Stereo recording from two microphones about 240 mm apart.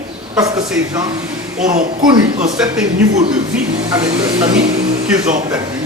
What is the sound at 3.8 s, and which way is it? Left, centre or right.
Speech, centre.